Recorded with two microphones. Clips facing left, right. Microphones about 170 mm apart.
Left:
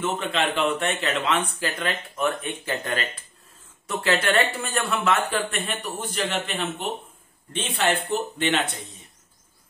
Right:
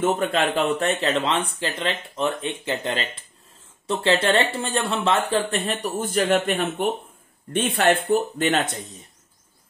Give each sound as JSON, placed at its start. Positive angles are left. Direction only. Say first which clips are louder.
{"t": 0.0, "sound": "speech", "louder": "right 4 dB", "side_deg": -45}